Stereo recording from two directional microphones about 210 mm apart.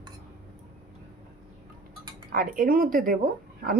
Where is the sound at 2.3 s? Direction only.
40° right (ahead or behind).